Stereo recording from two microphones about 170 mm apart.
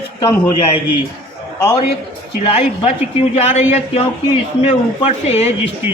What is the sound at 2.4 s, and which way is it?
A woman's voice, 35° left (ahead or behind).